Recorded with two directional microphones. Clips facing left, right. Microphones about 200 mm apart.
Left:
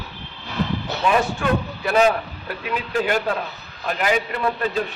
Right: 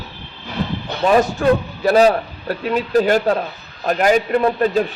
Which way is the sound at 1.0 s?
40° right (ahead or behind).